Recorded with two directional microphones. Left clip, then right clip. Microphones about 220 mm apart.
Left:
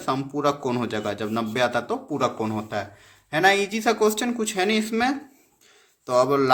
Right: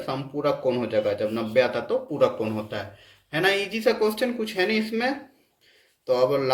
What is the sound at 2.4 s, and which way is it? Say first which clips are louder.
Speech: left 2 dB; 40° left (ahead or behind).